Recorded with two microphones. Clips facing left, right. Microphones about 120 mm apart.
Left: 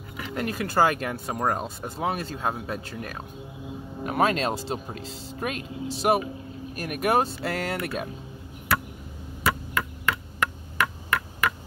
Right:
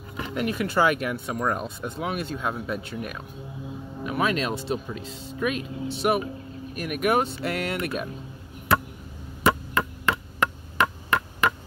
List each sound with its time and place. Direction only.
0.3 s speech: 40° left (ahead or behind)
9.4 s chop: 25° right (ahead or behind)